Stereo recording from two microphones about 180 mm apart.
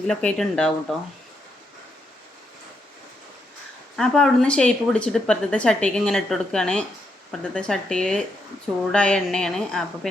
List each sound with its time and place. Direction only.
0.1 s a woman's voice: 5° left (ahead or behind)
3.9 s a woman's voice: centre (ahead or behind)